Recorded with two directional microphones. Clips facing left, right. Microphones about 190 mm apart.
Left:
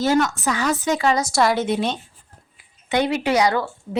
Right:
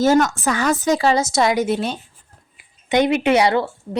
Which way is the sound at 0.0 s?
45° right (ahead or behind).